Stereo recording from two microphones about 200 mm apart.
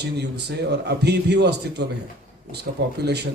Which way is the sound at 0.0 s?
55° right (ahead or behind).